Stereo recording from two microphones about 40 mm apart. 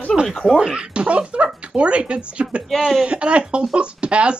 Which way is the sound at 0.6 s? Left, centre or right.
Right.